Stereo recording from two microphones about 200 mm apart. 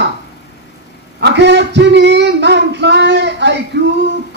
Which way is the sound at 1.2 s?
60° right (ahead or behind).